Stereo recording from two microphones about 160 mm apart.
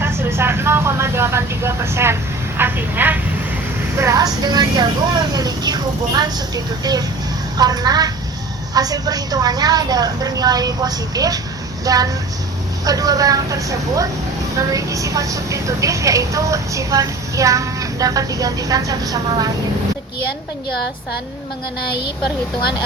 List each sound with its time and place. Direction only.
0.0 s speech: 15° right (ahead or behind)
2.6 s vehicle: 10° right (ahead or behind)
3.9 s a woman's voice: 20° right (ahead or behind)